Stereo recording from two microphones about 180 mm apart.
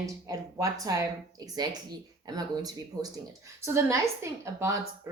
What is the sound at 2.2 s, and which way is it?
A woman's voice, 20° right (ahead or behind).